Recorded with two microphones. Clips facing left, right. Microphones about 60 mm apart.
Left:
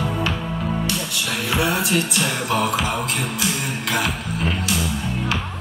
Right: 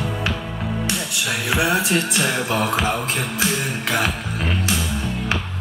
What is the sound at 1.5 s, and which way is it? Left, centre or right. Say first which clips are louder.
Music: right 1 dB; right.